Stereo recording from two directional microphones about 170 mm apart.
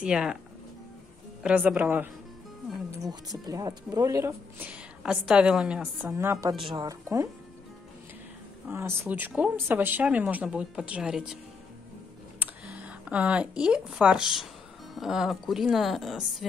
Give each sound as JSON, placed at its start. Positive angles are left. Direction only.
{"t": 0.0, "sound": "a woman's voice", "side_deg": -5}
{"t": 1.4, "sound": "speech", "side_deg": -5}
{"t": 3.0, "sound": "speech", "side_deg": -20}
{"t": 8.6, "sound": "speech", "side_deg": -15}
{"t": 12.4, "sound": "a woman's voice", "side_deg": -5}